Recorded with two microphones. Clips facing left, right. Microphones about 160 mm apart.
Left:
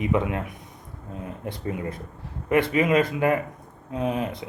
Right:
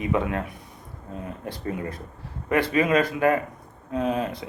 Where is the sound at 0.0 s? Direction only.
20° left (ahead or behind).